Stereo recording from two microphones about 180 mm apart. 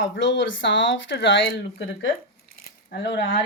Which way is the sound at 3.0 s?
80° left.